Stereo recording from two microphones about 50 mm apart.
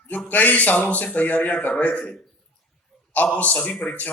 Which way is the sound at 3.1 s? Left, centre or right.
Left.